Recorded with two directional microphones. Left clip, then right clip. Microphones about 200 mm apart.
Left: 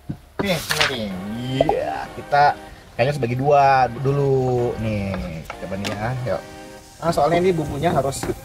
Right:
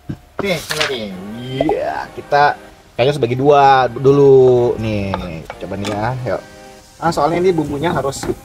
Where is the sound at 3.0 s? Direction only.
40° right (ahead or behind).